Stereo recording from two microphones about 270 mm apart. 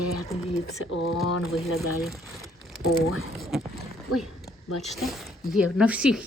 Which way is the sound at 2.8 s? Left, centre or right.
Left.